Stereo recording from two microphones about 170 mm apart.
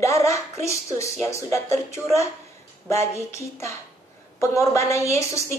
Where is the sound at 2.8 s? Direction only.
15° left (ahead or behind).